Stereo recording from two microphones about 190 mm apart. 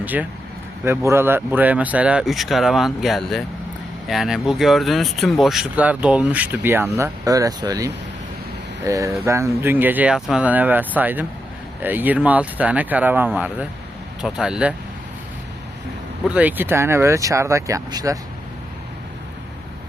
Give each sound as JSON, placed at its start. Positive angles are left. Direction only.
{"t": 0.0, "sound": "speech", "side_deg": -10}
{"t": 16.3, "sound": "speech", "side_deg": -10}